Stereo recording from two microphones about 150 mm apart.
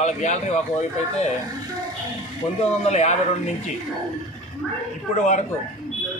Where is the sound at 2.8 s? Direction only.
50° left (ahead or behind).